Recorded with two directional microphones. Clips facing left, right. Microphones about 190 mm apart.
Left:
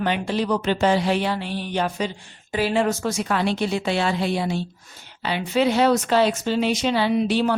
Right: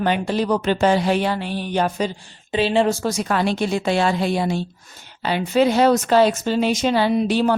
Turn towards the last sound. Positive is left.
turn(degrees=-45)  # may be behind; listen again after turning